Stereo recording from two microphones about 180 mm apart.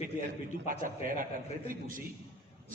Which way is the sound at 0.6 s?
50° right (ahead or behind).